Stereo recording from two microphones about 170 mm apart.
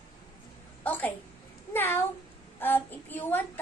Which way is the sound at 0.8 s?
10° left (ahead or behind).